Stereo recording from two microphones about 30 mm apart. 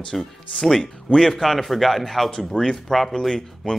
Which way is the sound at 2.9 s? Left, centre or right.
Centre.